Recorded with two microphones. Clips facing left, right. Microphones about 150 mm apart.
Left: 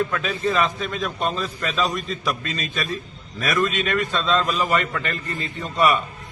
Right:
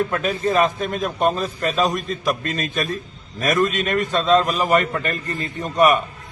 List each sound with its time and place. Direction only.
0.1 s a man's voice: 45° right (ahead or behind)